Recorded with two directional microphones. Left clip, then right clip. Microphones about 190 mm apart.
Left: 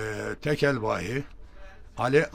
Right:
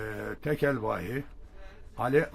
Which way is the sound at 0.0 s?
20° left (ahead or behind).